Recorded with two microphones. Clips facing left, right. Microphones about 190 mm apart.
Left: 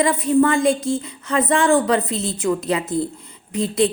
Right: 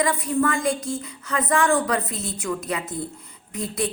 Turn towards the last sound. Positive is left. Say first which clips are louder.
# left 8 dB
turn(degrees=25)  # may be behind; listen again after turning